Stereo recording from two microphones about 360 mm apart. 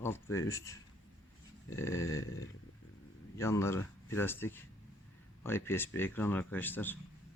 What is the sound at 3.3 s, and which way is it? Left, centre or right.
Speech, centre.